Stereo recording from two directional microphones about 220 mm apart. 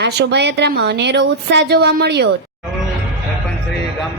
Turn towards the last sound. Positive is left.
turn(degrees=-50)  # may be behind; listen again after turning